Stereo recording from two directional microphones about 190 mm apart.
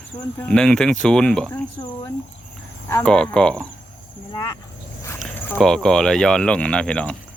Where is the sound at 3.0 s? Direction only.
5° left (ahead or behind).